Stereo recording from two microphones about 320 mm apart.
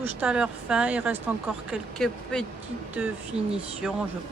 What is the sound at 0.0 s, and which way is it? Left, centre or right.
Speech, centre.